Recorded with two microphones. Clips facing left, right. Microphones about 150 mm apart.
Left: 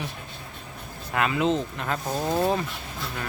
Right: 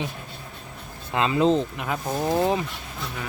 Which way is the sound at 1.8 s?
10° right (ahead or behind).